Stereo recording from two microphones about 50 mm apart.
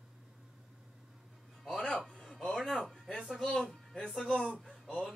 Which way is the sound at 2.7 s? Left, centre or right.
Centre.